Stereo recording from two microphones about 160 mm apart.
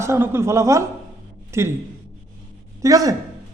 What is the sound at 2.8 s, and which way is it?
Speech, 20° right (ahead or behind).